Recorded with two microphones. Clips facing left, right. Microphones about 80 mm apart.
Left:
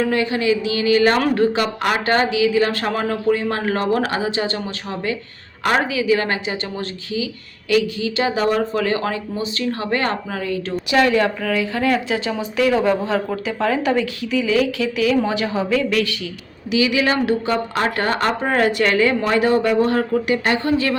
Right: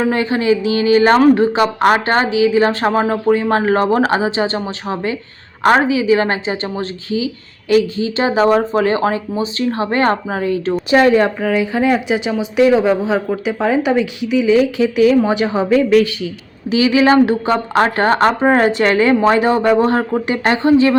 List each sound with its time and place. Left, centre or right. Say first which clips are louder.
0.0 s a woman's voice: right 3 dB; right